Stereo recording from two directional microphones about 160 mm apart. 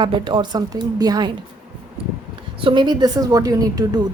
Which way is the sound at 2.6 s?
30° right (ahead or behind).